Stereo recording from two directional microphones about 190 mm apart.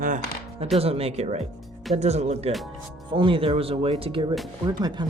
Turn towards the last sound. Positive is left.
turn(degrees=-20)  # may be behind; listen again after turning